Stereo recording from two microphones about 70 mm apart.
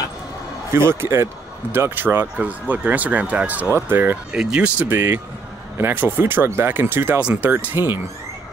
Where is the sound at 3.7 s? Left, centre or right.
Right.